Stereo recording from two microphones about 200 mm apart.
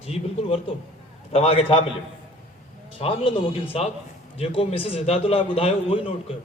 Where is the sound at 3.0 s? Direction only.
30° left (ahead or behind).